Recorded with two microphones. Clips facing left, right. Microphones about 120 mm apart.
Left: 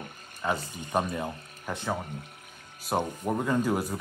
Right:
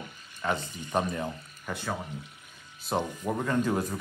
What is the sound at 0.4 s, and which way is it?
Speech, 10° left (ahead or behind).